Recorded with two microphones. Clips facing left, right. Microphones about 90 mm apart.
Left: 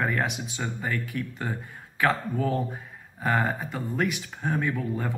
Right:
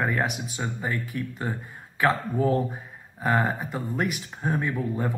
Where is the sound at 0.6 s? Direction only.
20° right (ahead or behind).